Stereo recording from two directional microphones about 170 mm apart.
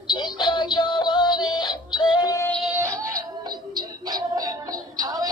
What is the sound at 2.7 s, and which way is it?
Music, 15° right (ahead or behind).